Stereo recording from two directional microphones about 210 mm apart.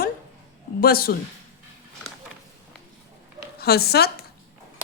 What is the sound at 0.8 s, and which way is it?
Speech, 45° left (ahead or behind).